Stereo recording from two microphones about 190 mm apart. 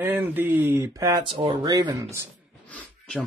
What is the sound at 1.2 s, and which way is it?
Speech, 30° right (ahead or behind).